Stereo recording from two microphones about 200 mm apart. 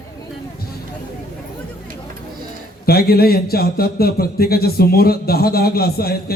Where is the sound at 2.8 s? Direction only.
50° left (ahead or behind).